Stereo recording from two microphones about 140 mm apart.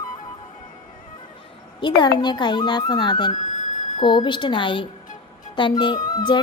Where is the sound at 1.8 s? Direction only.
30° left (ahead or behind).